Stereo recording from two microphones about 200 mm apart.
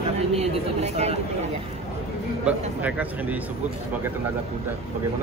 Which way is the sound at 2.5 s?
5° right (ahead or behind).